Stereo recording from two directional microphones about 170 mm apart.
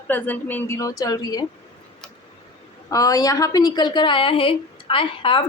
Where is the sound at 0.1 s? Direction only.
10° left (ahead or behind).